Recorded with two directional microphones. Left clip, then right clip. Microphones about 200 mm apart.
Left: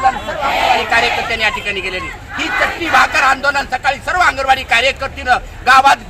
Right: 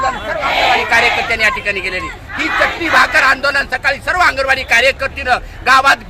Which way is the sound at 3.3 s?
25° right (ahead or behind).